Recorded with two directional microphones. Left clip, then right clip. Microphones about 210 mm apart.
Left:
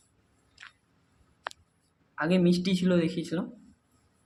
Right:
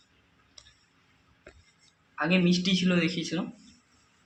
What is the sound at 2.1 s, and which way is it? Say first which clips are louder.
Speech: even; 25° left (ahead or behind).